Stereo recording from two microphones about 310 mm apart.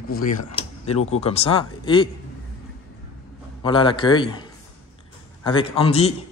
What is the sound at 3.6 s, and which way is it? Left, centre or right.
Speech, centre.